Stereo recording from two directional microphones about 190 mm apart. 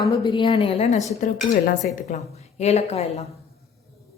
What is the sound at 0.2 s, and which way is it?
A woman's voice, 25° left (ahead or behind).